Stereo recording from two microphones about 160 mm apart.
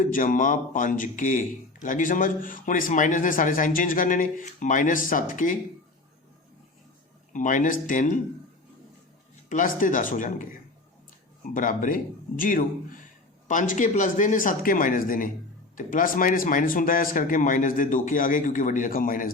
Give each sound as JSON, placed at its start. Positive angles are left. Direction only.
{"t": 0.0, "sound": "speech", "side_deg": 55}
{"t": 7.3, "sound": "speech", "side_deg": 55}
{"t": 9.5, "sound": "speech", "side_deg": 55}